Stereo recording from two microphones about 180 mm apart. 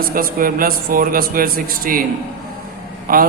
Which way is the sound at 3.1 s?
55° right (ahead or behind).